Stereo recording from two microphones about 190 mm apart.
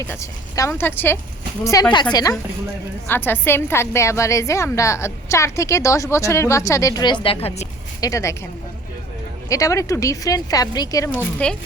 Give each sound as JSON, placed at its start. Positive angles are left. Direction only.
{"t": 0.1, "sound": "a woman's voice", "side_deg": 15}
{"t": 8.0, "sound": "a woman's voice", "side_deg": 15}
{"t": 9.5, "sound": "a woman's voice", "side_deg": 15}
{"t": 11.4, "sound": "speech", "side_deg": 5}